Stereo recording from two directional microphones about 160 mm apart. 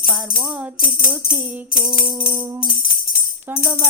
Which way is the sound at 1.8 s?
5° right (ahead or behind).